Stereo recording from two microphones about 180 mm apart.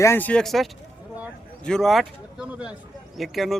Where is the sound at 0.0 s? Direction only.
10° left (ahead or behind).